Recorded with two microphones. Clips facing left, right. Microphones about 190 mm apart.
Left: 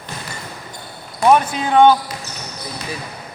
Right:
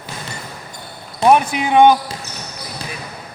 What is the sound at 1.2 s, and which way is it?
Speech, 10° right (ahead or behind).